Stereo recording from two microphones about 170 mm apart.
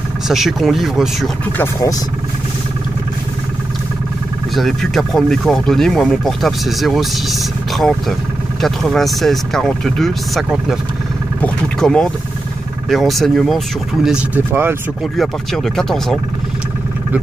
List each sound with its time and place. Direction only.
0.3 s speech: centre (ahead or behind)
1.6 s speech: 20° left (ahead or behind)
4.6 s speech: centre (ahead or behind)
8.5 s speech: centre (ahead or behind)
15.1 s speech: centre (ahead or behind)